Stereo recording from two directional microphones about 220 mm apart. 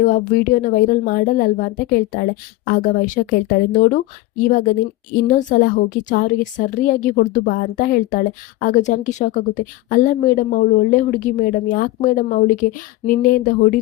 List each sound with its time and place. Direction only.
0.0 s a woman's voice: 35° left (ahead or behind)
4.4 s a woman's voice: 40° left (ahead or behind)